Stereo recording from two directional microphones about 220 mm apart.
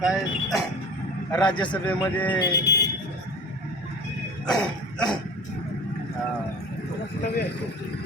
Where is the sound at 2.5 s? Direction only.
50° left (ahead or behind).